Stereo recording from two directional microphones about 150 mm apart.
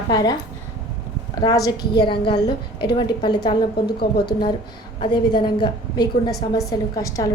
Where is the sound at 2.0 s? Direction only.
35° left (ahead or behind).